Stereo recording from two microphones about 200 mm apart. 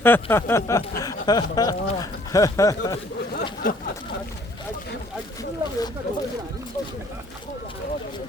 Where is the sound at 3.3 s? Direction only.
50° left (ahead or behind).